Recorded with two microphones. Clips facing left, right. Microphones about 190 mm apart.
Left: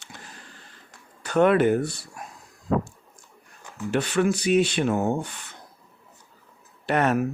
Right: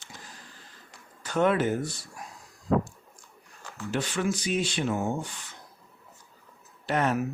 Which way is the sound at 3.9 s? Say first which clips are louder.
Left 6 dB; 65° left (ahead or behind).